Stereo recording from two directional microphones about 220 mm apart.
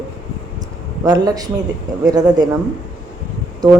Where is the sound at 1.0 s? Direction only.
20° right (ahead or behind).